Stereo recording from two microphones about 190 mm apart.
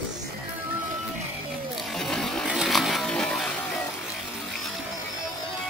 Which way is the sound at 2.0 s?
Centre (ahead or behind).